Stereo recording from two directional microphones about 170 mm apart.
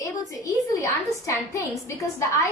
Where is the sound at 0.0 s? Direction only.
20° left (ahead or behind).